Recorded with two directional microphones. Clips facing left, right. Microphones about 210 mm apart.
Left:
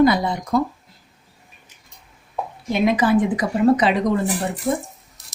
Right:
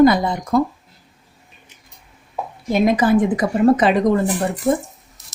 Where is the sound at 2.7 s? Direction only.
45° right (ahead or behind).